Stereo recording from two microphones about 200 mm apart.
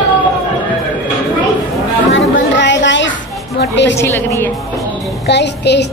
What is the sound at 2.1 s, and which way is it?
Chatter, 65° left (ahead or behind).